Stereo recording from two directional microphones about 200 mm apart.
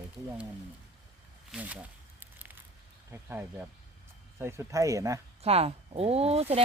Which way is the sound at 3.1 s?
10° right (ahead or behind).